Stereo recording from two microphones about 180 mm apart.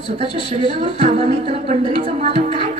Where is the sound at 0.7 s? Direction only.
30° right (ahead or behind).